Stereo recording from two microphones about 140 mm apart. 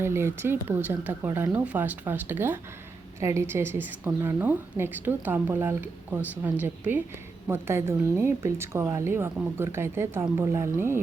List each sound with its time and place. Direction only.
0.0 s speech: 20° right (ahead or behind)